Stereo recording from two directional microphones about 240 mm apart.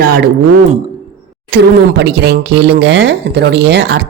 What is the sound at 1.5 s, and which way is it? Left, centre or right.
Speech, right.